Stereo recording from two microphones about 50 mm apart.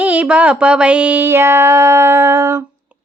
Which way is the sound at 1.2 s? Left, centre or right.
Right.